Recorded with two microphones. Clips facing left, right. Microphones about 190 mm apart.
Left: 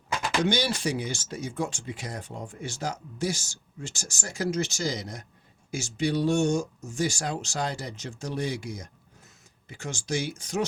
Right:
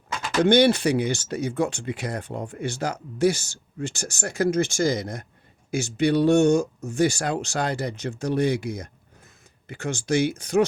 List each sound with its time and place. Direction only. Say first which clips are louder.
0.4 s speech: right 12 dB; 60° right (ahead or behind)